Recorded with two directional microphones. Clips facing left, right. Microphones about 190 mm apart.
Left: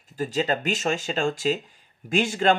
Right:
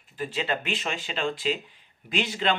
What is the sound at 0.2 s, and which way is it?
Speech, 40° left (ahead or behind).